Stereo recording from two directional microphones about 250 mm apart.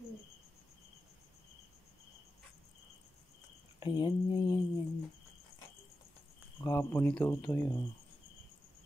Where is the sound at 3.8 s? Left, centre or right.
Centre.